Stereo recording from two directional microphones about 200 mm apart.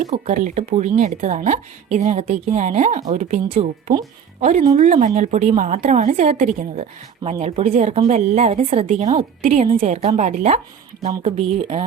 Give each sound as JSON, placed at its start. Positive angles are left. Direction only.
{"t": 0.0, "sound": "speech", "side_deg": -35}